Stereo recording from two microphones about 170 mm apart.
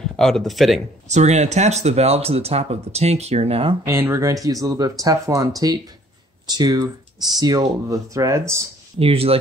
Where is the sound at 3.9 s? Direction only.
15° right (ahead or behind).